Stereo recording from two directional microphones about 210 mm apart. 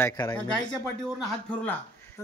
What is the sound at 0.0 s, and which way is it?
Speech, 15° left (ahead or behind).